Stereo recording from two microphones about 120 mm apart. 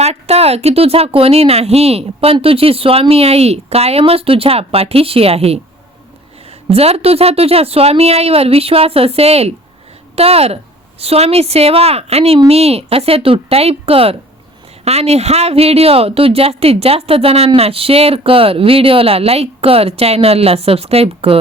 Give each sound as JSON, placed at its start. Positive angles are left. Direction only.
{"t": 0.0, "sound": "speech", "side_deg": -60}
{"t": 6.7, "sound": "speech", "side_deg": -55}